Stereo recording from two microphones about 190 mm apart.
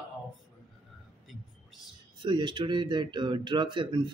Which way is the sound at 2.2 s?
25° right (ahead or behind).